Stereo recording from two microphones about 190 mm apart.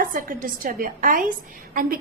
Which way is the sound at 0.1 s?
45° right (ahead or behind).